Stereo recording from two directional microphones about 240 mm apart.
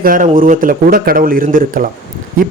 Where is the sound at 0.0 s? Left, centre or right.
Right.